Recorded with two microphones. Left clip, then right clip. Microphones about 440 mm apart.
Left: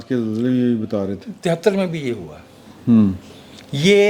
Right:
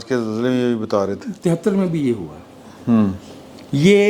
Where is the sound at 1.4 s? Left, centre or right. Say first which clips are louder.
Left 2 dB; left.